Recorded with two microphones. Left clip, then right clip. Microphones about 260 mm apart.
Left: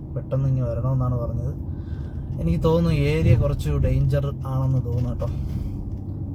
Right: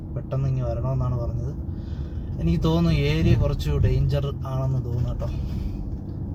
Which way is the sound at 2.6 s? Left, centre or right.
Left.